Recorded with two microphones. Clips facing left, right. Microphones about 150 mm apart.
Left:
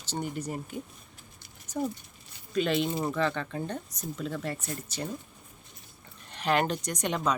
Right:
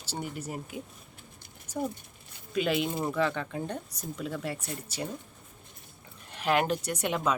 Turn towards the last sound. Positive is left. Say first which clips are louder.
# even
turn(degrees=-5)  # may be behind; listen again after turning